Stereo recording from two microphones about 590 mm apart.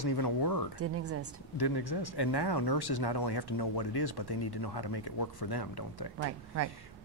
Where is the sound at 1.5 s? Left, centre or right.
Left.